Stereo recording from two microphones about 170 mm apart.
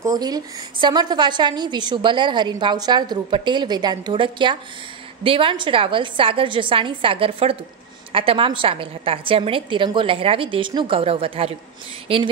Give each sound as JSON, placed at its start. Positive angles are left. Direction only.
{"t": 0.0, "sound": "a woman's voice", "side_deg": -20}